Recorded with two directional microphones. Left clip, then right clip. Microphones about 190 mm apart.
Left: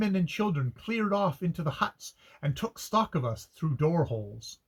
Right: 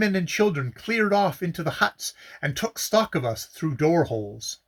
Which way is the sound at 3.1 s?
15° right (ahead or behind).